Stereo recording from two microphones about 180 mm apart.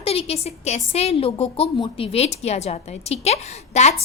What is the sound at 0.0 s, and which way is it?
A woman's voice, 30° left (ahead or behind).